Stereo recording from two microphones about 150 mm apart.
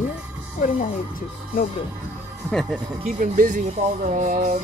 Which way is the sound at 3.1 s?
65° right (ahead or behind).